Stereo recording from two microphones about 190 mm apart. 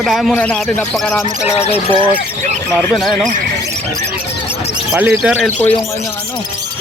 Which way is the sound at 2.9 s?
Centre (ahead or behind).